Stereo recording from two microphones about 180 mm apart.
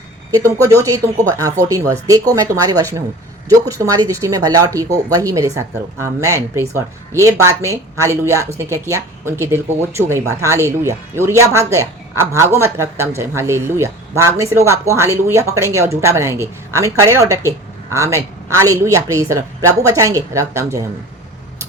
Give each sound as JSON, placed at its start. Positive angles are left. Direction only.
{"t": 0.3, "sound": "speech", "side_deg": -15}